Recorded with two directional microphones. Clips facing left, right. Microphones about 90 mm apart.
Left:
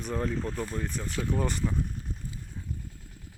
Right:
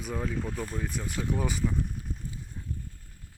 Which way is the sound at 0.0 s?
5° right (ahead or behind).